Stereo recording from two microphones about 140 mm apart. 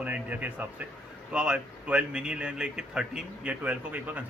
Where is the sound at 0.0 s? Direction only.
10° right (ahead or behind).